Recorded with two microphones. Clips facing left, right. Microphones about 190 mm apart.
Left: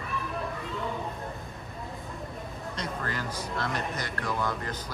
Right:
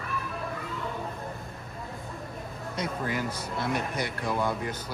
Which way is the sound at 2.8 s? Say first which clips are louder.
Right 4 dB; 10° right (ahead or behind).